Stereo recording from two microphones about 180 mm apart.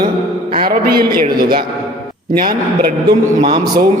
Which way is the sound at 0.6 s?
55° right (ahead or behind).